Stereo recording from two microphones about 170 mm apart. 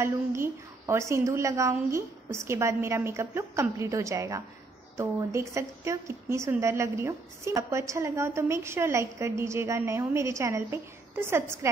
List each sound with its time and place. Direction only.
0.0 s a woman's voice: 15° right (ahead or behind)